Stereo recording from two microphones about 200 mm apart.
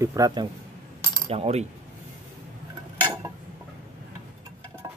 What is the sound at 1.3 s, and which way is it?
Coin, 30° right (ahead or behind).